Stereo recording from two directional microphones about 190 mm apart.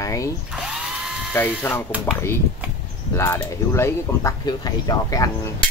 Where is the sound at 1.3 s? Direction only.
10° left (ahead or behind).